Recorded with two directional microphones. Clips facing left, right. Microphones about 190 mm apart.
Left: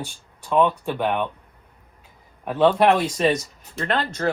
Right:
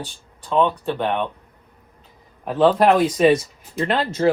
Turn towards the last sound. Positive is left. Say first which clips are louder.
# right 4 dB
turn(degrees=-5)  # may be behind; listen again after turning